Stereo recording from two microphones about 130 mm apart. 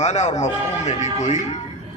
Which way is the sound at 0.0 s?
55° left (ahead or behind).